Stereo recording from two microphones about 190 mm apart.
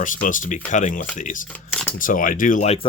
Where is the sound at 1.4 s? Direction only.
10° left (ahead or behind).